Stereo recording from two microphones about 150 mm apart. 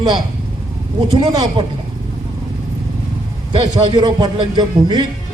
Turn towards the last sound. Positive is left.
turn(degrees=-30)  # may be behind; listen again after turning